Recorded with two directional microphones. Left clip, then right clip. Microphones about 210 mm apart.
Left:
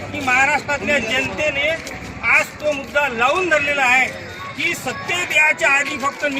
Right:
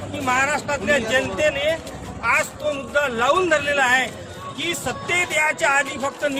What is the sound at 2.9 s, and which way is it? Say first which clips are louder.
Speech: left 1 dB; 15° right (ahead or behind).